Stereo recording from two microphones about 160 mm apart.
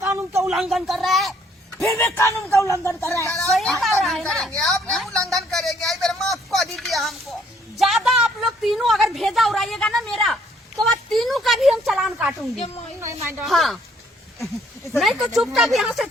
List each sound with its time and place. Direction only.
0.0 s a sound: 20° right (ahead or behind)
0.4 s a woman's voice: 5° right (ahead or behind)
2.1 s speech: 20° left (ahead or behind)
3.5 s a woman's voice: centre (ahead or behind)
5.5 s a sound: centre (ahead or behind)
7.8 s a woman's voice: centre (ahead or behind)
12.5 s speech: 40° left (ahead or behind)
13.0 s speech: 15° right (ahead or behind)
13.4 s a woman's voice: centre (ahead or behind)
14.9 s a woman's voice: centre (ahead or behind)